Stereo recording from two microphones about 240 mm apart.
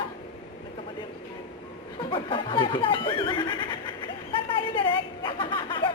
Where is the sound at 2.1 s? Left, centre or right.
Left.